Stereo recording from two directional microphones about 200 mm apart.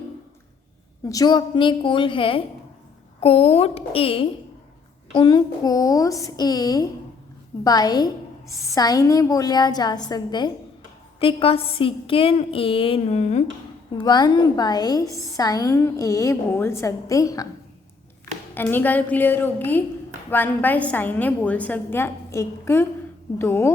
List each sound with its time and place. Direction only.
1.0 s a woman's voice: 20° left (ahead or behind); by 13.4 s 35° left (ahead or behind)
14.0 s a woman's voice: 20° left (ahead or behind)
18.5 s a woman's voice: 10° left (ahead or behind)